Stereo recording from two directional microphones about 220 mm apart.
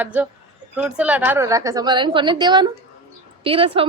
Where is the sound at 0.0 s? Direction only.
10° right (ahead or behind).